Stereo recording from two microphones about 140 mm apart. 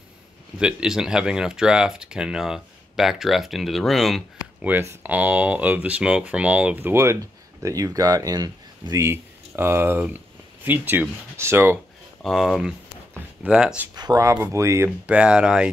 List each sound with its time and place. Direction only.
0.6 s speech: 5° right (ahead or behind)
4.6 s speech: 15° right (ahead or behind)
12.2 s a sound: centre (ahead or behind)
13.4 s speech: 5° right (ahead or behind)
13.9 s speech: 25° right (ahead or behind)
15.0 s speech: 5° right (ahead or behind)